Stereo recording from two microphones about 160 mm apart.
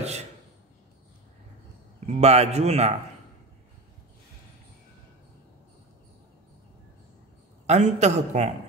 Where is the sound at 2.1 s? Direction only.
40° right (ahead or behind).